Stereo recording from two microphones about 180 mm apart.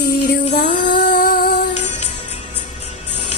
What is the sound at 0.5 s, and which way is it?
Music, 55° left (ahead or behind).